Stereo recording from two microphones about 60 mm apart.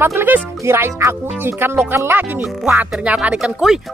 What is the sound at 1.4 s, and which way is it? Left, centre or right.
Speech, right.